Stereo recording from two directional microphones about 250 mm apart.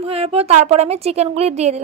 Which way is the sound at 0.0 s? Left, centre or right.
Right.